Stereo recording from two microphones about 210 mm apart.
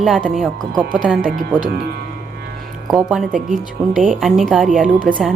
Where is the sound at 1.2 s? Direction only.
40° right (ahead or behind).